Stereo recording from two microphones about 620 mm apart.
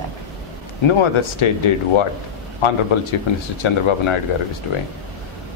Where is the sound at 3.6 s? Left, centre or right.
Left.